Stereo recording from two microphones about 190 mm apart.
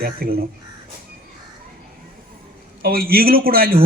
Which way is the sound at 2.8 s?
50° right (ahead or behind).